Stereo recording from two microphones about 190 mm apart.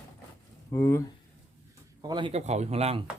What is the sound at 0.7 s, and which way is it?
Speech, 15° left (ahead or behind).